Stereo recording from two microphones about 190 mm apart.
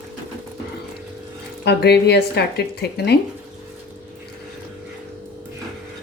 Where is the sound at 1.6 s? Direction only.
60° left (ahead or behind).